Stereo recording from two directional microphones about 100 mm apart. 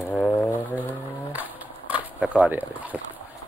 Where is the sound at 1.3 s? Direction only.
15° right (ahead or behind).